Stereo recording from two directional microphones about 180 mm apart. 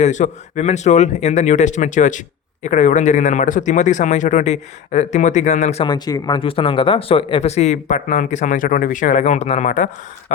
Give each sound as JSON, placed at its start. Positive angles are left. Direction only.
{"t": 0.0, "sound": "speech", "side_deg": 40}
{"t": 5.8, "sound": "speech", "side_deg": 20}